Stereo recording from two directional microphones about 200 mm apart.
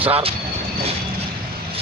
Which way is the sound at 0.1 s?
30° right (ahead or behind).